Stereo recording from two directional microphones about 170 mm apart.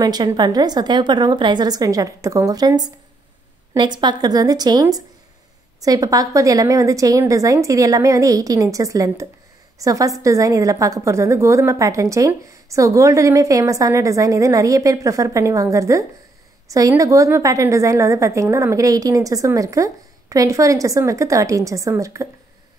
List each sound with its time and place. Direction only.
0.0 s a woman's voice: 25° right (ahead or behind)